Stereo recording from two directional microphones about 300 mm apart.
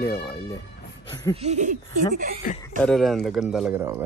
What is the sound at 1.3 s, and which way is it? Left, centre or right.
Speech, right.